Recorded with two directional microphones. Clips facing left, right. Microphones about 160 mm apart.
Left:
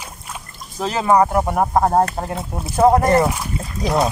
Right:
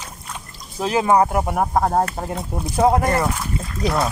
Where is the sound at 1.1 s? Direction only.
10° right (ahead or behind).